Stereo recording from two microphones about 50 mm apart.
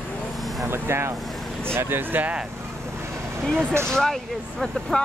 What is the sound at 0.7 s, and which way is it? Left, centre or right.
Speech, right.